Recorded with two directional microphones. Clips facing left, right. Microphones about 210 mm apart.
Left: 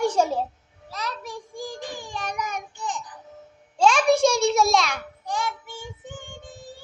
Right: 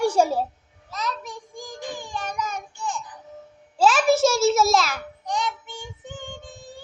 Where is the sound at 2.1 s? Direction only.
10° left (ahead or behind).